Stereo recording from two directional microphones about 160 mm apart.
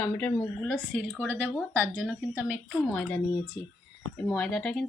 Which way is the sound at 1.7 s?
15° right (ahead or behind).